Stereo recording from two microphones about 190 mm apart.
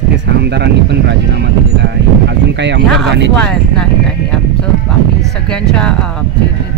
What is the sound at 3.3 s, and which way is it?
Speech, 5° left (ahead or behind).